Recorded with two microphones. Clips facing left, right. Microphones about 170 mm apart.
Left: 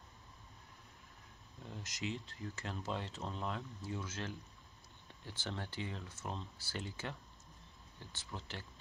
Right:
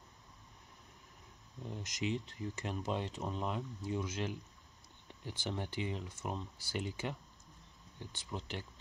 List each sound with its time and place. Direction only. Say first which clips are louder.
1.7 s speech: right 5 dB; 20° right (ahead or behind)